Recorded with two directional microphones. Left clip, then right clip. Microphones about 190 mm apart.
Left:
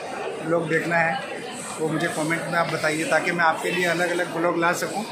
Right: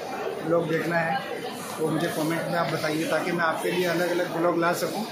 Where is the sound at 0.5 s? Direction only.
15° left (ahead or behind).